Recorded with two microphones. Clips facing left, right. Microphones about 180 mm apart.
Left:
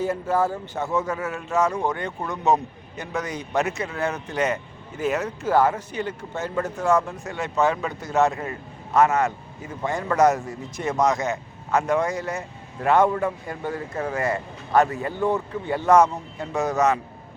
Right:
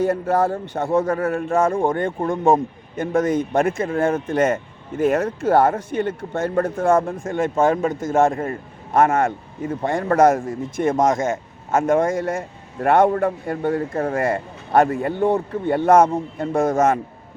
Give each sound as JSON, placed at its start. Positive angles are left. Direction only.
{"t": 0.0, "sound": "speech", "side_deg": -65}